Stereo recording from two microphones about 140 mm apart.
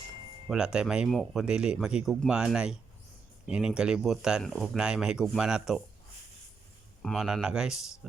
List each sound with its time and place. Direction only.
0.4 s speech: 5° right (ahead or behind)
7.0 s speech: centre (ahead or behind)